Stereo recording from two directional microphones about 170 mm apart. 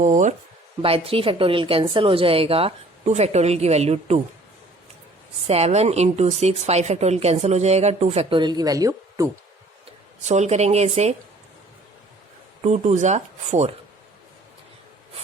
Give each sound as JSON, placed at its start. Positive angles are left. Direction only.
{"t": 0.0, "sound": "speech", "side_deg": -45}
{"t": 0.8, "sound": "speech", "side_deg": -35}
{"t": 5.5, "sound": "speech", "side_deg": -40}
{"t": 9.8, "sound": "speech", "side_deg": -40}
{"t": 12.6, "sound": "speech", "side_deg": -45}